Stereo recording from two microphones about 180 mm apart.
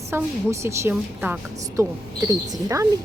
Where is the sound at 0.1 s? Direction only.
15° right (ahead or behind).